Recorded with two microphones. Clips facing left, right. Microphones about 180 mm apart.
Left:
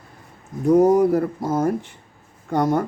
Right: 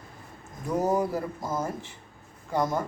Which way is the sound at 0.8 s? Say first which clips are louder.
Left 10 dB; 60° left (ahead or behind).